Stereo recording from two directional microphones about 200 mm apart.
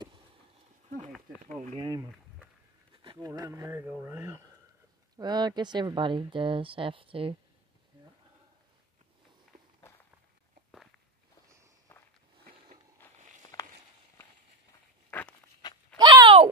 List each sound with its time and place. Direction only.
0.8 s goat: 40° right (ahead or behind)
1.8 s speech: 20° right (ahead or behind)
11.9 s walk: 10° left (ahead or behind)
13.5 s walk: 15° left (ahead or behind)
15.0 s walk: 10° left (ahead or behind)
15.6 s a sound: 20° left (ahead or behind)
16.0 s a sound: 20° right (ahead or behind)